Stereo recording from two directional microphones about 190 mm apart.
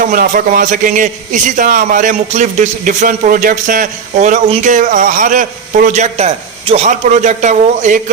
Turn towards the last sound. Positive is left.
turn(degrees=-40)  # may be behind; listen again after turning